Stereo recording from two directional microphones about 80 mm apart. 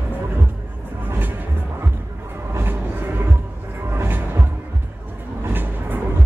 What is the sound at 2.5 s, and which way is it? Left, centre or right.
Vehicle, right.